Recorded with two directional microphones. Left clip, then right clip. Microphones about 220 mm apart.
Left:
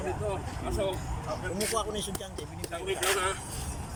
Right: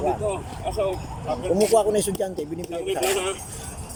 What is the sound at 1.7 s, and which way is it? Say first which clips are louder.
Speech: right 13 dB; 40° right (ahead or behind).